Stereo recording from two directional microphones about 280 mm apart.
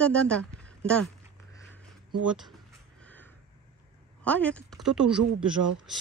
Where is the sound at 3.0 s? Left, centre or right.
Centre.